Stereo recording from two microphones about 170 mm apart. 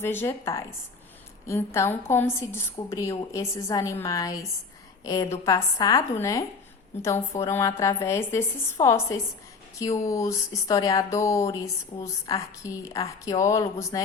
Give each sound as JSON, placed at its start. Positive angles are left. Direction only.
{"t": 0.0, "sound": "a woman's voice", "side_deg": 15}